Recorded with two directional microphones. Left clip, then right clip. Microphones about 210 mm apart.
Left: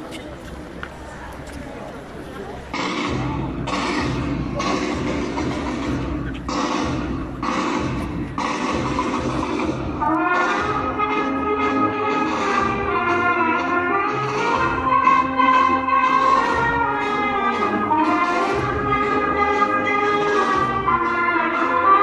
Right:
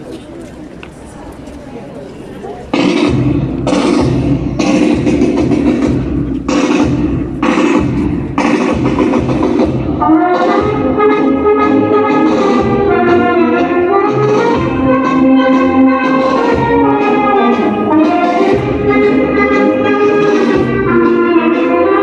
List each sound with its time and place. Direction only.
2.7 s music: 50° right (ahead or behind)